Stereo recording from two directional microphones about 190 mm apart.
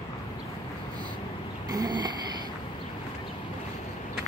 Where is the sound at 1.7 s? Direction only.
20° right (ahead or behind).